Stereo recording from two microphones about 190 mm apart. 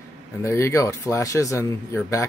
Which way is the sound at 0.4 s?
15° left (ahead or behind).